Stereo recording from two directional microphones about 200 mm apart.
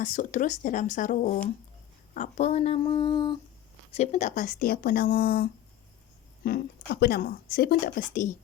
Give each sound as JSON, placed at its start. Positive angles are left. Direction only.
{"t": 0.0, "sound": "speech", "side_deg": 40}
{"t": 3.9, "sound": "speech", "side_deg": 35}